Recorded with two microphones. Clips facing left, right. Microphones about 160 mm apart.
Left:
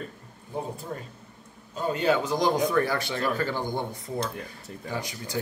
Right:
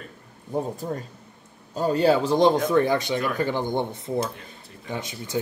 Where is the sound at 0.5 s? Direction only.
40° right (ahead or behind).